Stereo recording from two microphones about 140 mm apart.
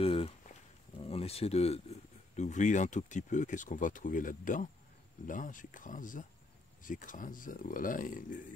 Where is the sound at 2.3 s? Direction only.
60° left (ahead or behind).